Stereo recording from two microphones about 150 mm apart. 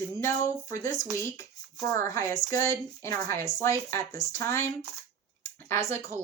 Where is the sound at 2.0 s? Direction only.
20° left (ahead or behind).